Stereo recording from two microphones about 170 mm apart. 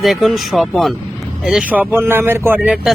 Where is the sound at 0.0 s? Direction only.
Centre (ahead or behind).